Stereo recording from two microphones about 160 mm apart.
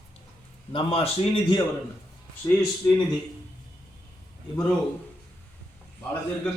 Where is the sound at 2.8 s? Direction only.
15° left (ahead or behind).